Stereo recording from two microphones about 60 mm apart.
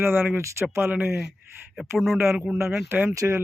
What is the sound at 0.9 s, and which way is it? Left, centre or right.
Speech, right.